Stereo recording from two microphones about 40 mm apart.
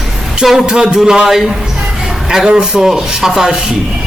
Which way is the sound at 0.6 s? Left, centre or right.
Centre.